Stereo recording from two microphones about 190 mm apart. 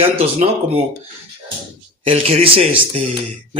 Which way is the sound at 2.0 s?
30° right (ahead or behind).